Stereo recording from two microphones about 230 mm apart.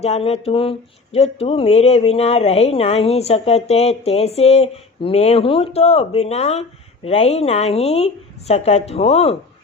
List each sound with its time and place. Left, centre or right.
0.0 s speech: left